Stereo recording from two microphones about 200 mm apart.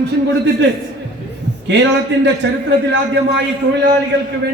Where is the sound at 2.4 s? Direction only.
60° right (ahead or behind).